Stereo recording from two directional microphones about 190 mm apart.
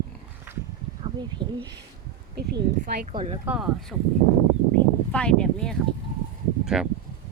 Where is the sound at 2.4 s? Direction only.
60° right (ahead or behind).